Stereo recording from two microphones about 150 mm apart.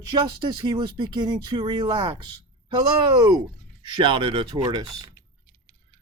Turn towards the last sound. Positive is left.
turn(degrees=-30)  # may be behind; listen again after turning